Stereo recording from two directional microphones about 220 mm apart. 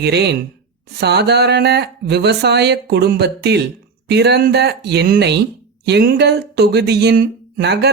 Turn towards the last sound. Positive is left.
turn(degrees=-50)  # may be behind; listen again after turning